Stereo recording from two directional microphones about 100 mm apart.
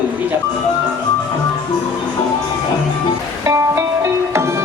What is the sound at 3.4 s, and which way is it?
Music, 30° right (ahead or behind).